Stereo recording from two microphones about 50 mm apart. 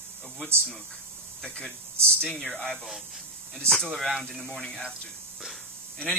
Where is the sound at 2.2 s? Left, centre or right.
Centre.